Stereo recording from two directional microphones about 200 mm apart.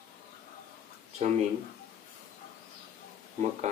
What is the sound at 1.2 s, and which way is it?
Speech, 35° right (ahead or behind).